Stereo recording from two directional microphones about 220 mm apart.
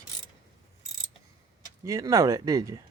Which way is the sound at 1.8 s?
15° right (ahead or behind).